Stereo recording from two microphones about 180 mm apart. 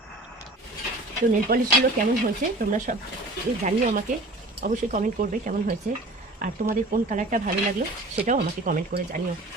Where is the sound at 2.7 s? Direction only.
45° right (ahead or behind).